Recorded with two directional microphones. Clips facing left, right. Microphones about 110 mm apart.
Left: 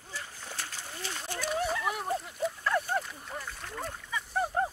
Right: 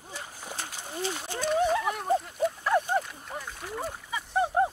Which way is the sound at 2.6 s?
20° right (ahead or behind).